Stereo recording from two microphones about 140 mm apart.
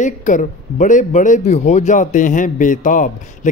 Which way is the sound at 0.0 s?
65° left (ahead or behind).